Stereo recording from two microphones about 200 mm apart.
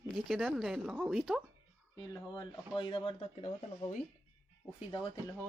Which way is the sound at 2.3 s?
20° left (ahead or behind).